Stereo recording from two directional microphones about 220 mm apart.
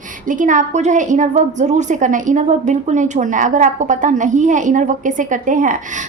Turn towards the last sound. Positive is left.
turn(degrees=-35)  # may be behind; listen again after turning